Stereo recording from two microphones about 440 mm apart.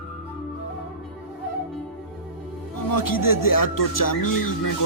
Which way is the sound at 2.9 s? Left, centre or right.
Left.